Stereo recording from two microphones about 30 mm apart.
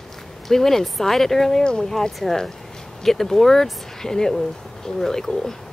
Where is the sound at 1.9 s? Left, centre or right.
Centre.